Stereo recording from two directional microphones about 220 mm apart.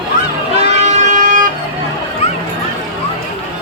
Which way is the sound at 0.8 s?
35° right (ahead or behind).